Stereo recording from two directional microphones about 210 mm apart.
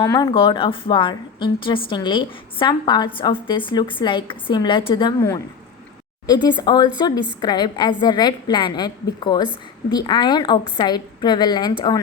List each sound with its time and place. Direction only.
0.0 s a woman's voice: 20° left (ahead or behind)